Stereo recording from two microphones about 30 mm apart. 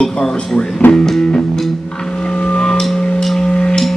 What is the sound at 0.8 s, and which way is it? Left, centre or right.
Speech, left.